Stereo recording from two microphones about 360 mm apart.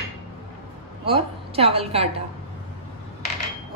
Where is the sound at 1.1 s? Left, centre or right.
Centre.